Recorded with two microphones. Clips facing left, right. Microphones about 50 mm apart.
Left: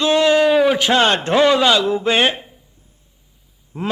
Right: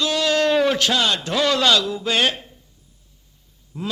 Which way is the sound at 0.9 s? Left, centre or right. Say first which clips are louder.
Left 6 dB; left.